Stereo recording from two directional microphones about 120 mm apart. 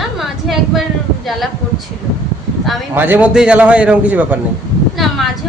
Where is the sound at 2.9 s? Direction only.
15° right (ahead or behind).